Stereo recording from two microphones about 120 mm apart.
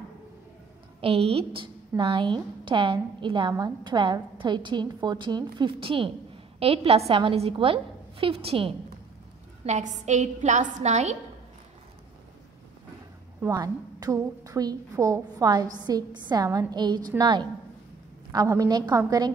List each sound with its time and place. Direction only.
1.0 s a woman's voice: 55° right (ahead or behind)
9.7 s a woman's voice: 80° right
13.5 s a woman's voice: 35° right (ahead or behind)